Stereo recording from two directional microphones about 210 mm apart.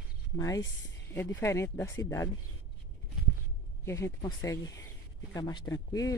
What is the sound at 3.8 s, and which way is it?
Speech, 15° left (ahead or behind).